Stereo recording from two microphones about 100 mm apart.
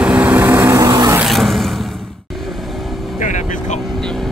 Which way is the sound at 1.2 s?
Centre (ahead or behind).